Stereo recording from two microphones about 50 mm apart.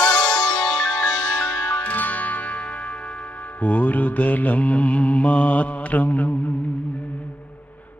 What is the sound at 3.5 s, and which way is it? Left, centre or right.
Mantra, left.